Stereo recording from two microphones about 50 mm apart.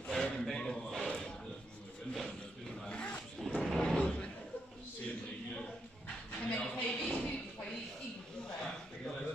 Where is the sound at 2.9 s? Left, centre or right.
Left.